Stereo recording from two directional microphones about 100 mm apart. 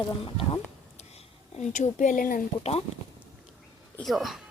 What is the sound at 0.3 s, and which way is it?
Speech, 55° left (ahead or behind).